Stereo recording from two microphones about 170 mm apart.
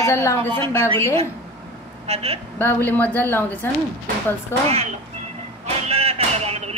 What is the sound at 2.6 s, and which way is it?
Speech, 10° left (ahead or behind).